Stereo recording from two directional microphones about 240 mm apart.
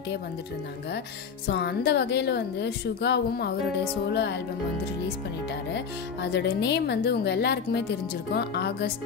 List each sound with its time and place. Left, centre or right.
1.5 s a woman's voice: left
6.3 s a woman's voice: left